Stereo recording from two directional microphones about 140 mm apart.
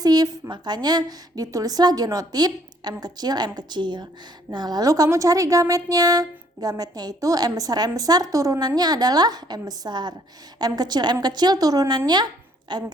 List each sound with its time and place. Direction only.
0.0 s speech: 30° right (ahead or behind)